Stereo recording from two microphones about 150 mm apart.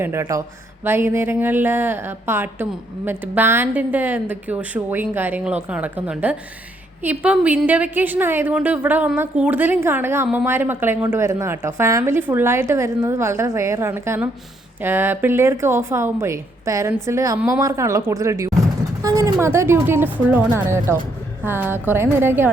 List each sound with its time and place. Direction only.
0.0 s a woman's voice: 20° right (ahead or behind)